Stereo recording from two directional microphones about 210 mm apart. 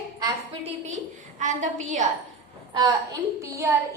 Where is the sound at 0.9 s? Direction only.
35° right (ahead or behind).